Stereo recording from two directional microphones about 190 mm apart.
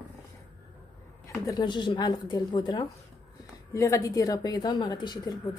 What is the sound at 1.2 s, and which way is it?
A woman's voice, 20° left (ahead or behind).